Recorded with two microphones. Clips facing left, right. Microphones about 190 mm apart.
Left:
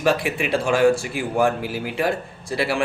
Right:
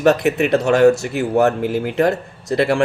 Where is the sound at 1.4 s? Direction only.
45° right (ahead or behind).